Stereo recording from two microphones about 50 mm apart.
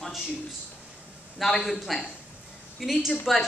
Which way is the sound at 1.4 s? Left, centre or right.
Centre.